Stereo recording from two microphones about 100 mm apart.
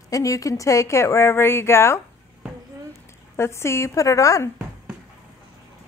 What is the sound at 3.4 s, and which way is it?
Speech, 25° left (ahead or behind).